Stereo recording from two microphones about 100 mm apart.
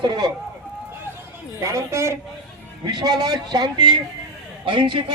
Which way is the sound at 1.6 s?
30° right (ahead or behind).